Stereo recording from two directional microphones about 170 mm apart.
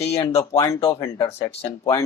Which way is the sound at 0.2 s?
20° left (ahead or behind).